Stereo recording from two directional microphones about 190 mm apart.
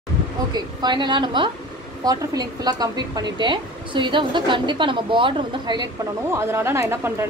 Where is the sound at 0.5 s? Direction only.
20° right (ahead or behind).